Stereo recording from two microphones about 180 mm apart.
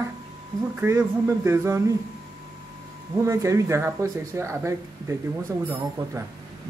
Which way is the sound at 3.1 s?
15° right (ahead or behind).